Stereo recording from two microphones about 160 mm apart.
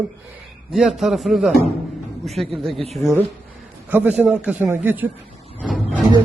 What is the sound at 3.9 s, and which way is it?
A man's voice, 10° right (ahead or behind).